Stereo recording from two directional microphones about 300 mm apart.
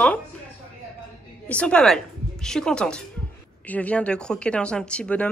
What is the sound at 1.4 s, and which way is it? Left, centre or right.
A woman's voice, centre.